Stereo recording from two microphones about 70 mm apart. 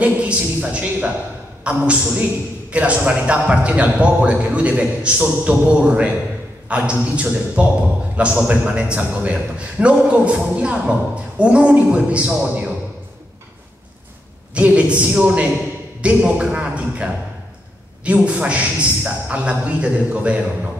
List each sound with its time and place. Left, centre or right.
0.0 s a man's voice: centre
14.5 s a man's voice: centre